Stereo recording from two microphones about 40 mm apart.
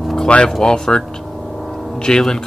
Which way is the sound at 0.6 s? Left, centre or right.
Centre.